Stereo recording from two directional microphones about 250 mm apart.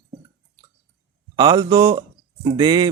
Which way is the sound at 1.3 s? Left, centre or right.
Centre.